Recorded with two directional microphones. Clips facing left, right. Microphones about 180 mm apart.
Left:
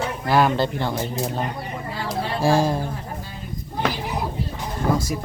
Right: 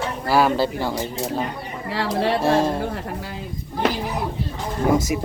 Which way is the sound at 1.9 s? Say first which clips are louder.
Right 7 dB; 80° right.